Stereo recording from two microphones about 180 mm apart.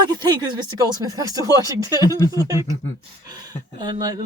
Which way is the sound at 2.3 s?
20° right (ahead or behind).